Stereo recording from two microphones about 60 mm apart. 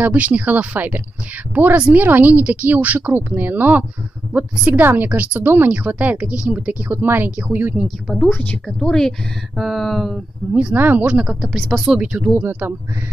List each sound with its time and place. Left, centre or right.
0.0 s speech: right
6.9 s speech: right
7.7 s a sound: centre
8.3 s a woman's voice: left
8.6 s speech: centre
9.6 s a sound: centre
10.7 s speech: right
11.5 s a sound: centre
12.0 s speech: centre
12.3 s speech: right